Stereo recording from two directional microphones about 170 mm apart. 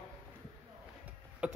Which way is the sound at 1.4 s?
10° right (ahead or behind).